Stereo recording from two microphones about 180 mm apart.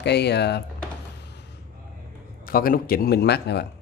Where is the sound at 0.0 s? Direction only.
70° left (ahead or behind).